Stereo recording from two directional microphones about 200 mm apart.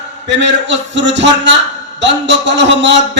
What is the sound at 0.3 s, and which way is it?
A man's voice, 60° right (ahead or behind).